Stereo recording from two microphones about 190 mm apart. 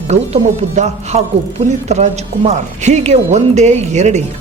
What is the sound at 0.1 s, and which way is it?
Speech, 35° right (ahead or behind).